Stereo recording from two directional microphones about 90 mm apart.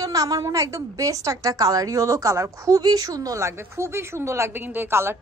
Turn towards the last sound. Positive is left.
turn(degrees=-25)  # may be behind; listen again after turning